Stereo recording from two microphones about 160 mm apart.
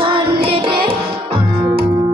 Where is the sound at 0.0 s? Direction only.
35° right (ahead or behind).